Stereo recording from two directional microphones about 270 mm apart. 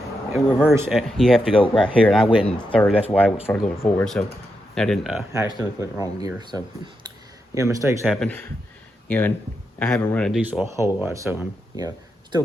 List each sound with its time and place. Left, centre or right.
0.3 s speech: centre
1.6 s speech: centre
1.9 s speech: centre
2.2 s speech: centre
2.7 s speech: centre
5.3 s speech: centre
8.0 s speech: centre